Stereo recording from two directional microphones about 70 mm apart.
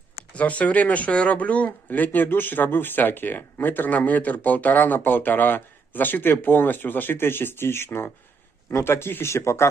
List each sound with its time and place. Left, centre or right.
0.3 s speech: left